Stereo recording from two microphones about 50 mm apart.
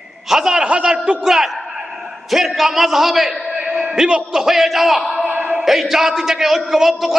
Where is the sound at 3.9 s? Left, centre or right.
Centre.